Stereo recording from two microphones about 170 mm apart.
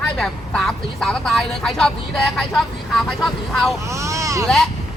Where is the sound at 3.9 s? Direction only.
15° right (ahead or behind).